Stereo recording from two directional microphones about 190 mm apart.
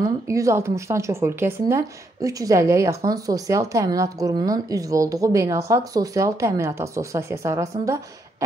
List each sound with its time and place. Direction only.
0.0 s speech: 15° right (ahead or behind)